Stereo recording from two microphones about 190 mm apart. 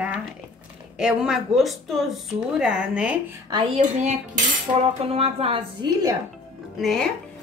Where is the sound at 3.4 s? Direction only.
25° right (ahead or behind).